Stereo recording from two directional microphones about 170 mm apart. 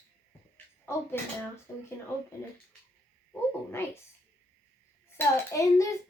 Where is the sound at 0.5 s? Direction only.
15° left (ahead or behind).